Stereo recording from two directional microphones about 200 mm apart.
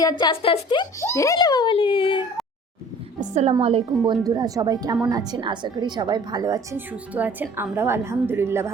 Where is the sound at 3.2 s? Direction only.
35° right (ahead or behind).